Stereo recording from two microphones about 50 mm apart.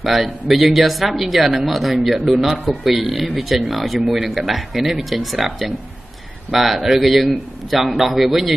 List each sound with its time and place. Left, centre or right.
0.0 s speech: centre